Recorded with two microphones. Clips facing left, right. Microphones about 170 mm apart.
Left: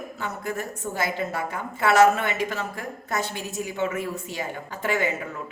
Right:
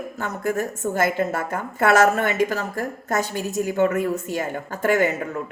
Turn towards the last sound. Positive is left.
turn(degrees=-45)  # may be behind; listen again after turning